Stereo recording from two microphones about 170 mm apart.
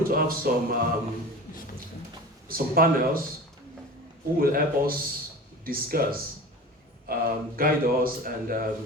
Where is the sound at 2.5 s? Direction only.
60° right (ahead or behind).